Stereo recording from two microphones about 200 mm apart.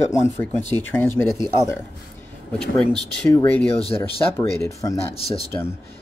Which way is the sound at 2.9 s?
5° left (ahead or behind).